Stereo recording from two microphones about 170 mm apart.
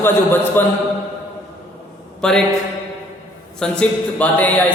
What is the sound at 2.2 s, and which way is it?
Speech, 5° left (ahead or behind).